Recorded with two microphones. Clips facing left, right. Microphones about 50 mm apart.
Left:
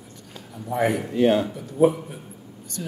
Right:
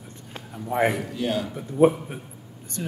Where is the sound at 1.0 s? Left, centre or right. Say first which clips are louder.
Left 7 dB; left.